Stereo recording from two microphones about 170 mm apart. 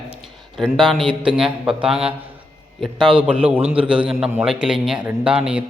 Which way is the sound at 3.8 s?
5° right (ahead or behind).